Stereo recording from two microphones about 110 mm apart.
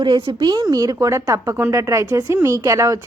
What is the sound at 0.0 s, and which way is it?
A woman's voice, 45° right (ahead or behind).